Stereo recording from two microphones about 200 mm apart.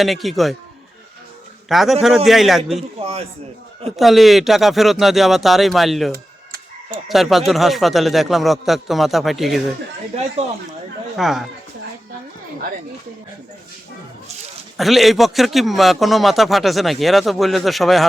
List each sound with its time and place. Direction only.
0.0 s a man's voice: centre (ahead or behind)
1.7 s a man's voice: centre (ahead or behind)
3.0 s a man's voice: 30° right (ahead or behind)
3.9 s a man's voice: centre (ahead or behind)
6.1 s chicken: 50° right (ahead or behind)
7.1 s a man's voice: centre (ahead or behind)
11.2 s a man's voice: centre (ahead or behind)
14.8 s a man's voice: centre (ahead or behind)